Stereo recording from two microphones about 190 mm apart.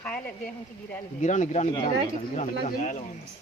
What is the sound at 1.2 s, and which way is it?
Speech, 40° left (ahead or behind).